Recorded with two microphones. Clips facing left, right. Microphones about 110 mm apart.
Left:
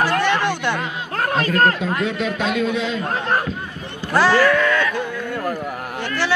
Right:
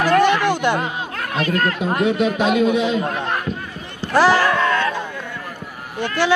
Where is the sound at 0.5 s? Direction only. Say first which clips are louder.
Right 4 dB; 15° right (ahead or behind).